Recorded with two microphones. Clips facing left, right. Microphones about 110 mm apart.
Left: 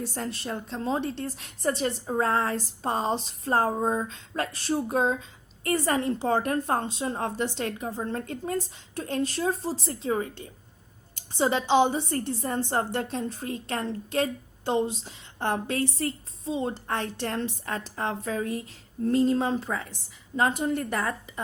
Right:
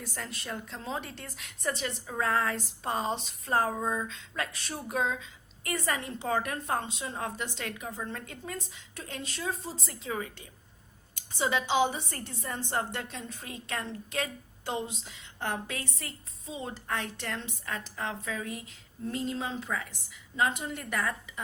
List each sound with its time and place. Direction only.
0.0 s a woman's voice: 30° left (ahead or behind)